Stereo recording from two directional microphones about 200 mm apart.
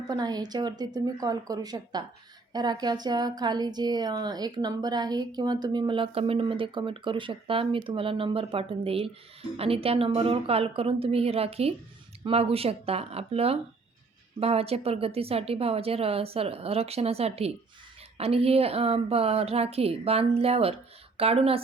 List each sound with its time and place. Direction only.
0.1 s a woman's voice: 20° right (ahead or behind)